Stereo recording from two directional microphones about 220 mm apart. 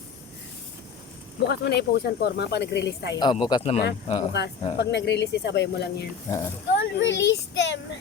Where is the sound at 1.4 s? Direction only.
50° left (ahead or behind).